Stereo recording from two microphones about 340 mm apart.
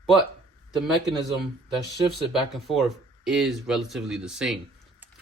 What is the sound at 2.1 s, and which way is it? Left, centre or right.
Speech, centre.